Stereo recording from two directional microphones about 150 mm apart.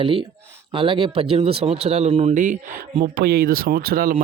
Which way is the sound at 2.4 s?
60° right (ahead or behind).